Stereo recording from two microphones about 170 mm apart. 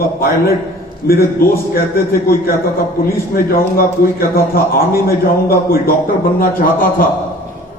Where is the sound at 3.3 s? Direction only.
60° left (ahead or behind).